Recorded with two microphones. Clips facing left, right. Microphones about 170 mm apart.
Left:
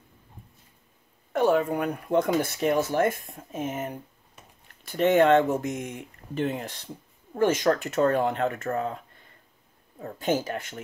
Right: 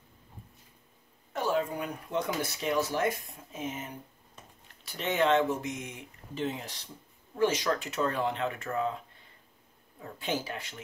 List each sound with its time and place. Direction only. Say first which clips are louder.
1.3 s speech: left 7 dB; 60° left (ahead or behind)